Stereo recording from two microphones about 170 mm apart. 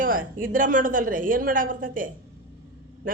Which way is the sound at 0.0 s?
55° right (ahead or behind).